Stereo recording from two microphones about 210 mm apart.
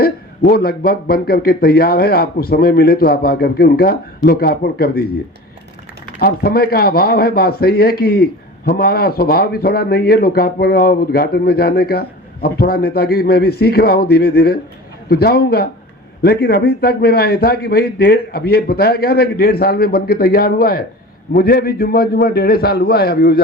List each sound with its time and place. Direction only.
0.0 s speech: 45° left (ahead or behind)
6.1 s speech: 45° left (ahead or behind)